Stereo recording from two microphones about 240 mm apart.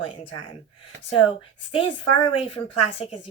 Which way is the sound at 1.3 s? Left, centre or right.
Left.